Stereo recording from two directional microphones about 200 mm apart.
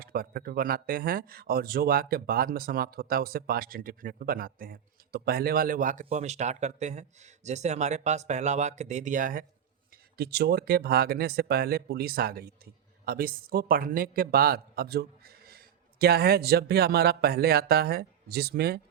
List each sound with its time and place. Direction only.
0.0 s speech: 50° right (ahead or behind)
10.2 s speech: 55° right (ahead or behind)